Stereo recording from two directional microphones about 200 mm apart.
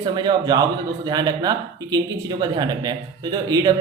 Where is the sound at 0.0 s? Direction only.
20° right (ahead or behind).